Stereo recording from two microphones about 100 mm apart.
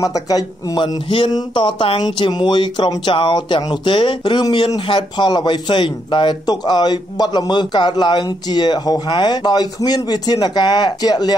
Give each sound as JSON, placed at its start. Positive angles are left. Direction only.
{"t": 0.0, "sound": "a man's voice", "side_deg": 40}
{"t": 0.7, "sound": "a sound", "side_deg": 60}
{"t": 1.3, "sound": "speech", "side_deg": 50}